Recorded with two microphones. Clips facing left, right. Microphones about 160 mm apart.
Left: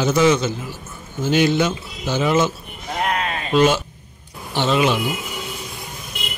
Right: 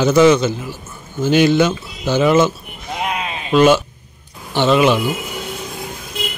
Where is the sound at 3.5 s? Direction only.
70° right (ahead or behind).